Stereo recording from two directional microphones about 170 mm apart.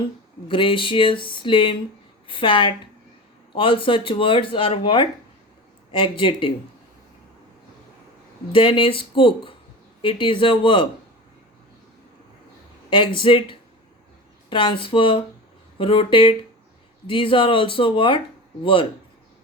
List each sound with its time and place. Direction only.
0.4 s speech: 30° left (ahead or behind)
8.5 s speech: 30° left (ahead or behind)
12.9 s speech: 30° left (ahead or behind)